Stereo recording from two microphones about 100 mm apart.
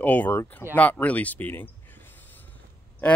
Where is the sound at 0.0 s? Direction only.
15° left (ahead or behind).